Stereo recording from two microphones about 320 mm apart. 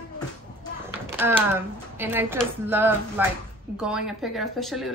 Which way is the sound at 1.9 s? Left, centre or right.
Centre.